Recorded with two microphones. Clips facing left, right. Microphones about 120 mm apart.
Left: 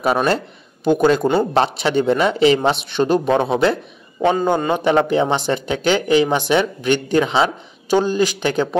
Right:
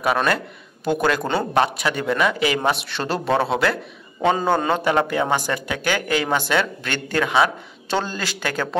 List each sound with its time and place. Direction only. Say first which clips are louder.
0.0 s speech: left 3 dB; 25° left (ahead or behind)